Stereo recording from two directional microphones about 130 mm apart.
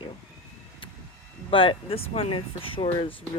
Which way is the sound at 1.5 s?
45° left (ahead or behind).